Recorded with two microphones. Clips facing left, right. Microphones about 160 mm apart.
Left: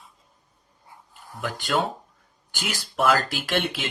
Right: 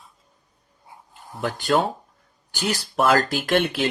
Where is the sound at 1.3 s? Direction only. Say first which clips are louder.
Right 4 dB; 25° right (ahead or behind).